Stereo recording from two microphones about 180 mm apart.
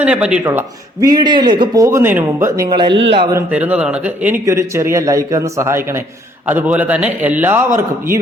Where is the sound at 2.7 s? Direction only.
25° right (ahead or behind).